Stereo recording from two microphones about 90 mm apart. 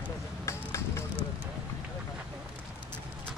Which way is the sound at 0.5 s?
30° left (ahead or behind).